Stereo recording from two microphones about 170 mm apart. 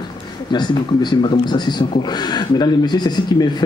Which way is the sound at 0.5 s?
25° left (ahead or behind).